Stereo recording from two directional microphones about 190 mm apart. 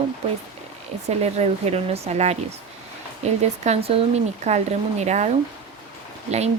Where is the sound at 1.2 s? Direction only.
35° right (ahead or behind).